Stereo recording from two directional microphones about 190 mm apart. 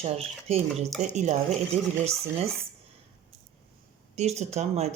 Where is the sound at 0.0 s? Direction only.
30° right (ahead or behind).